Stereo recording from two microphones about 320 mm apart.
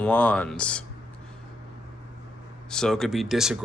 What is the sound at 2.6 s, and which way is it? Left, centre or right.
Speech, centre.